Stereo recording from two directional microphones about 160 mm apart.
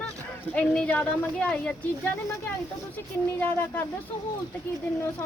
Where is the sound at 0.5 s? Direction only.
5° left (ahead or behind).